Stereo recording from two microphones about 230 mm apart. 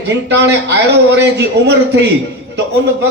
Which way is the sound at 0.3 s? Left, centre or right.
Right.